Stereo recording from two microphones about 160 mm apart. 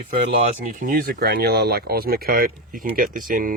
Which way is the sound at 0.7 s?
60° right (ahead or behind).